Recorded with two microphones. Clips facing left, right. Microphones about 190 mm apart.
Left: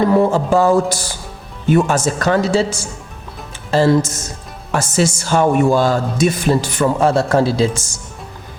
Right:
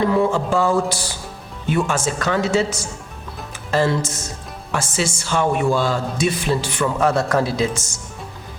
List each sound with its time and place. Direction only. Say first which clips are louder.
0.1 s speech: left 4 dB; 40° left (ahead or behind)
7.0 s speech: left 3 dB; 30° left (ahead or behind)